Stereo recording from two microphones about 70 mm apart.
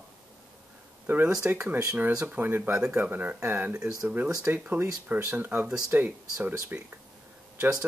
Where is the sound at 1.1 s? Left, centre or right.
Right.